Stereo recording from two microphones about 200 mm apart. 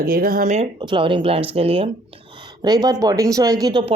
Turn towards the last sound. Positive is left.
turn(degrees=-20)  # may be behind; listen again after turning